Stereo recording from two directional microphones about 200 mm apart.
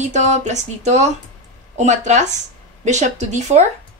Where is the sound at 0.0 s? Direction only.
35° right (ahead or behind).